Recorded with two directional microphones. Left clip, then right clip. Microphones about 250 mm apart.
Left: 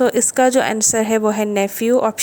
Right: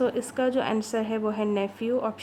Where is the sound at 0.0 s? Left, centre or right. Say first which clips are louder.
Left 11 dB; left.